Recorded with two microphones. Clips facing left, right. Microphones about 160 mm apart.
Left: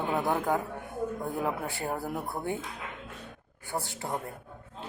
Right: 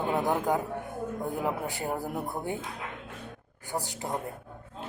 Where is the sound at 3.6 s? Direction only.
20° right (ahead or behind).